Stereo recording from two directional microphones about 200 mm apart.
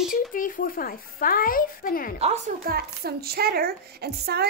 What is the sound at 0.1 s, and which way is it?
Speech, 45° left (ahead or behind).